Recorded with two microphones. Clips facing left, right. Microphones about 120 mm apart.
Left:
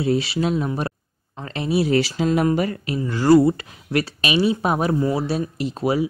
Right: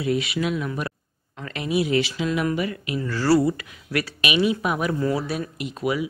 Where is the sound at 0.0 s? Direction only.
30° left (ahead or behind).